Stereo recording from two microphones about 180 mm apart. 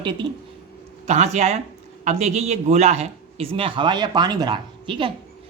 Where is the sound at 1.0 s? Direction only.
40° right (ahead or behind).